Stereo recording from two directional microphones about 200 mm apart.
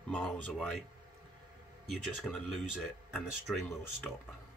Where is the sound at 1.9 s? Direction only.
Centre (ahead or behind).